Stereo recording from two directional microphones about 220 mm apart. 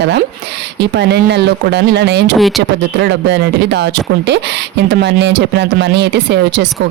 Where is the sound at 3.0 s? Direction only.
50° right (ahead or behind).